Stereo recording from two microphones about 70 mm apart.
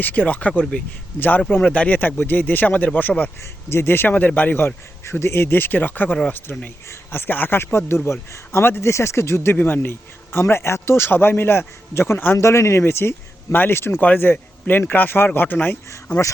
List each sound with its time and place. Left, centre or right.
0.0 s speech: left
3.7 s a man's voice: left